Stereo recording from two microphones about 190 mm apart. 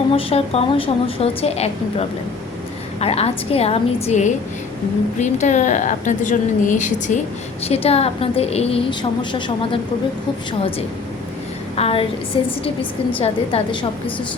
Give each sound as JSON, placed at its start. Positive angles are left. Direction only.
{"t": 0.1, "sound": "a woman's voice", "side_deg": 30}
{"t": 11.8, "sound": "a woman's voice", "side_deg": 30}